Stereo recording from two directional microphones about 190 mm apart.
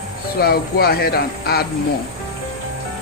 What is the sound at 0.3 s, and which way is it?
Speech, 55° left (ahead or behind).